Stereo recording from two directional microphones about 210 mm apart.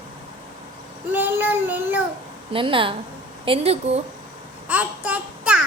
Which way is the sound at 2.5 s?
25° right (ahead or behind).